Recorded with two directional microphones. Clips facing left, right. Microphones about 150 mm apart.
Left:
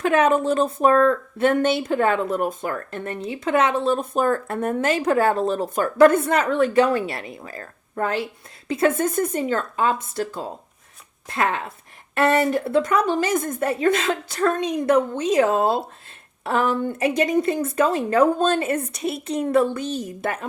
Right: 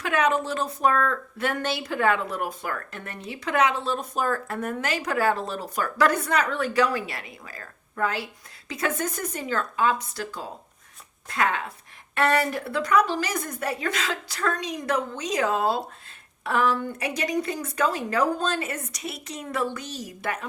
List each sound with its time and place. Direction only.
0.0 s a woman's voice: 50° left (ahead or behind)
0.8 s speech: 35° left (ahead or behind)
2.0 s speech: 45° left (ahead or behind)
2.6 s speech: 25° left (ahead or behind)
3.8 s speech: 55° left (ahead or behind)
4.3 s speech: 25° left (ahead or behind)
19.1 s speech: 55° left (ahead or behind)
20.1 s speech: 25° left (ahead or behind)